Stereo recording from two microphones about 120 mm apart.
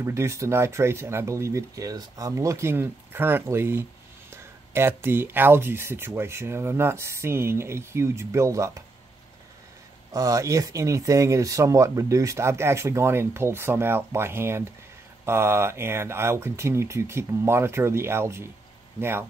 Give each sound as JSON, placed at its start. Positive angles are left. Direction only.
{"t": 0.0, "sound": "speech", "side_deg": -25}
{"t": 10.1, "sound": "speech", "side_deg": -30}